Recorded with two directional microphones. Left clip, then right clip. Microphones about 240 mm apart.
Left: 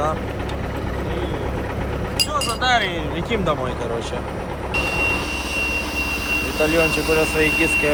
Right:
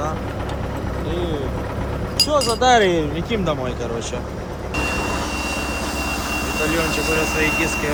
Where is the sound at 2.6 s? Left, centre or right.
Right.